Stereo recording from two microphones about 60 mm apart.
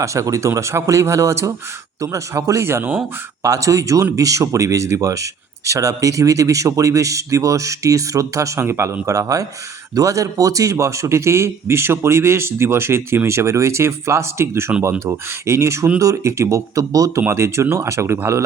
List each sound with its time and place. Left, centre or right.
0.0 s a man's voice: right
3.4 s speech: right
8.5 s a man's voice: right
16.0 s speech: right
17.2 s a man's voice: right